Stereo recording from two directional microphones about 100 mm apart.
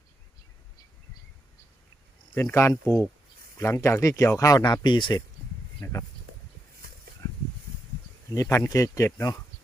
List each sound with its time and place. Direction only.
2.3 s speech: 15° left (ahead or behind)
2.6 s speech: 30° left (ahead or behind); by 5.2 s 50° left (ahead or behind)
5.8 s speech: 30° left (ahead or behind)
8.4 s speech: 30° left (ahead or behind)